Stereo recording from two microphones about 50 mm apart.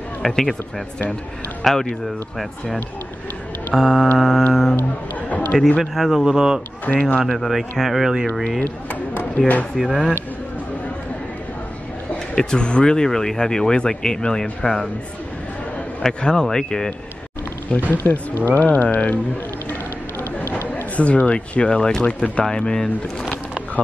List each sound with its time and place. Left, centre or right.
0.2 s a man's voice: centre
3.7 s a man's voice: centre
5.5 s a man's voice: centre
6.9 s speech: left
7.2 s a man's voice: centre
8.6 s speech: left
9.8 s a man's voice: centre
12.4 s speech: centre
16.0 s speech: centre
17.7 s speech: left
20.7 s speech: left
22.0 s speech: left
22.4 s speech: centre